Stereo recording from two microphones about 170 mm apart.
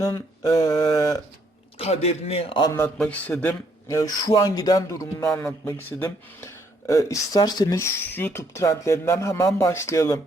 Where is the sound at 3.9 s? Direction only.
20° left (ahead or behind).